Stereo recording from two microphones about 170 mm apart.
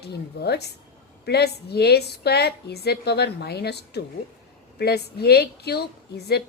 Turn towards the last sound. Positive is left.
turn(degrees=70)  # may be behind; listen again after turning